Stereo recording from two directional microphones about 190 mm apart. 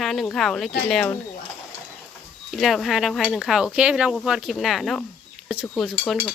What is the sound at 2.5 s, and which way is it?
Speech, centre (ahead or behind).